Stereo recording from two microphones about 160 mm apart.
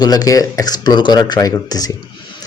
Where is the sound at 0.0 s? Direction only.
25° left (ahead or behind).